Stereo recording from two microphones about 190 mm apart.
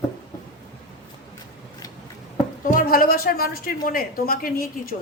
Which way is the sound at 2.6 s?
50° left (ahead or behind).